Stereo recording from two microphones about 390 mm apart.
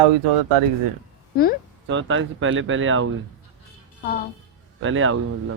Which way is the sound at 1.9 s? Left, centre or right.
Right.